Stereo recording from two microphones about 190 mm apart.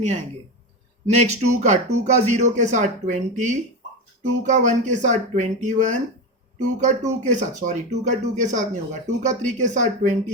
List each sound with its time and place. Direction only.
1.2 s speech: 35° right (ahead or behind)